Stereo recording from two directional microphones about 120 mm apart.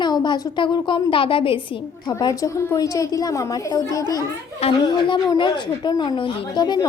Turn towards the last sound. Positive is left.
turn(degrees=35)  # may be behind; listen again after turning